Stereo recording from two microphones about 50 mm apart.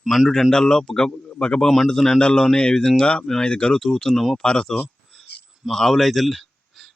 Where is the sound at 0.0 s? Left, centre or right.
Centre.